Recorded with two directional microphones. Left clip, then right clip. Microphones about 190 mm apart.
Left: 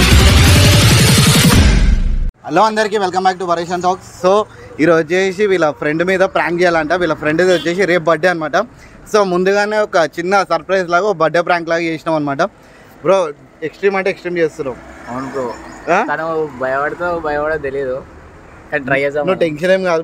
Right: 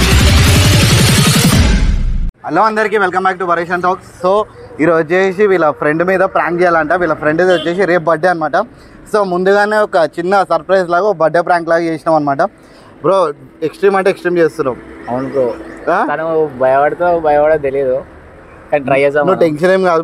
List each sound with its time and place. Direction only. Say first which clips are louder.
0.1 s music: even; centre (ahead or behind)
2.4 s speech: right 1 dB; 5° right (ahead or behind)
4.2 s speech: left 1 dB; 20° left (ahead or behind); by 9.3 s 5° left (ahead or behind)
9.5 s speech: right 3 dB; 15° right (ahead or behind)
9.8 s speech: right 2 dB; 5° left (ahead or behind)
11.1 s speech: right 2 dB; 15° left (ahead or behind)
11.3 s speech: right 3 dB; 5° left (ahead or behind)
13.0 s speech: right 2 dB; 15° right (ahead or behind)
16.1 s speech: right 4 dB; 5° right (ahead or behind)
16.6 s speech: right 8 dB; 15° right (ahead or behind); by 20.0 s 35° right (ahead or behind)